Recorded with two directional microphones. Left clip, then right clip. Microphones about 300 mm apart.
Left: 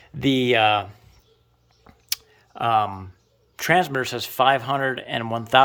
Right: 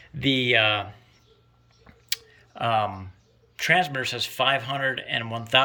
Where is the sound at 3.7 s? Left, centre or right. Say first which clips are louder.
Left 2 dB; centre.